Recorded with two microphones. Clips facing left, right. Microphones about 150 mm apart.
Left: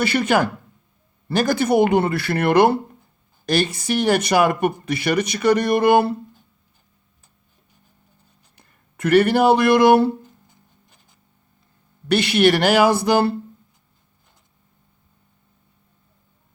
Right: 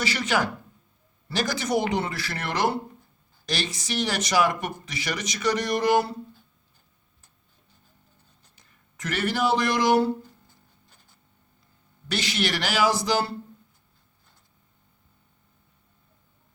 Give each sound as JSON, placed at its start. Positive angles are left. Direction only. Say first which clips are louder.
{"t": 0.0, "sound": "speech", "louder": "left 7 dB", "side_deg": 55}
{"t": 8.5, "sound": "speech", "louder": "left 5 dB", "side_deg": 60}
{"t": 12.0, "sound": "speech", "louder": "left 12 dB", "side_deg": 60}